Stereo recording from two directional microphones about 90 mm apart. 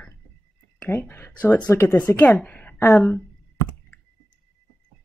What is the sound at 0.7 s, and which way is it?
Speech, 25° left (ahead or behind).